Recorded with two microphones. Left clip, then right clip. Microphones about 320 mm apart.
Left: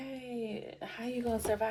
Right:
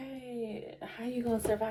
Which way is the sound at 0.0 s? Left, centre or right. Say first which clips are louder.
Even; left.